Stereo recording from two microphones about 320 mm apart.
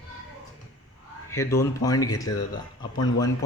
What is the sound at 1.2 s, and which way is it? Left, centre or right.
A man's voice, centre.